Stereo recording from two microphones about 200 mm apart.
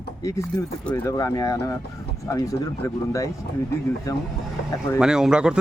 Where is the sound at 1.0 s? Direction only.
15° left (ahead or behind).